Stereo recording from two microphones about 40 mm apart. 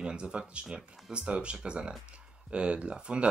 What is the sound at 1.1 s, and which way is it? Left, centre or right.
Speech, right.